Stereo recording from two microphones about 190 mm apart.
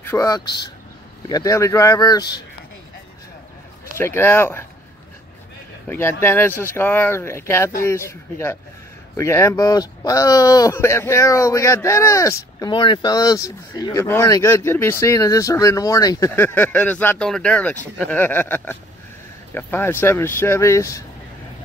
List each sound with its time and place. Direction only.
0.0 s speech: 15° left (ahead or behind)
4.0 s speech: 10° left (ahead or behind)
5.9 s speech: 10° left (ahead or behind)